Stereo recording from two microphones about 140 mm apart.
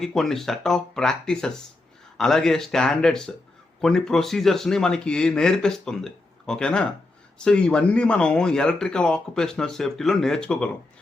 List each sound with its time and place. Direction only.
0.0 s speech: centre (ahead or behind)